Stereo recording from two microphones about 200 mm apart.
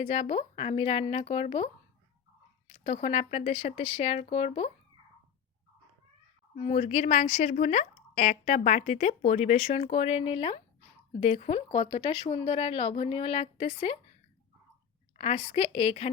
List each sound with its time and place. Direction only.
0.0 s speech: 30° left (ahead or behind)
2.7 s a woman's voice: 30° left (ahead or behind)
6.6 s a woman's voice: 30° left (ahead or behind)
15.2 s speech: 25° left (ahead or behind)